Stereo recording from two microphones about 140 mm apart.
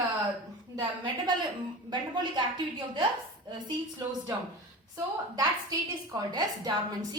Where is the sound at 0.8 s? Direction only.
35° right (ahead or behind).